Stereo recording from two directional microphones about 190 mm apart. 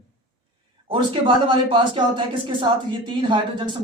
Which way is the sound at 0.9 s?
25° right (ahead or behind).